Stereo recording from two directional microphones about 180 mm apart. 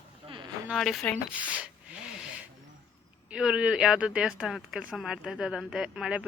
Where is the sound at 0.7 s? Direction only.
Centre (ahead or behind).